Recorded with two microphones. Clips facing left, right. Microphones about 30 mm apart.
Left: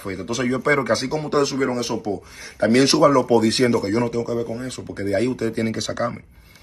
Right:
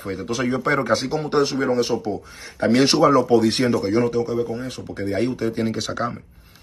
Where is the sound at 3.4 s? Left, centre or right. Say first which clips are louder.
Left 1 dB; left.